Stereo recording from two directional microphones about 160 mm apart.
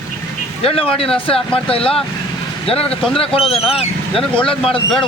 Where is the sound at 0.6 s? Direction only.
35° left (ahead or behind).